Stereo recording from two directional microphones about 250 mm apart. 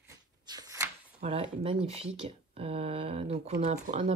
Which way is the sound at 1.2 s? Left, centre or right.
Right.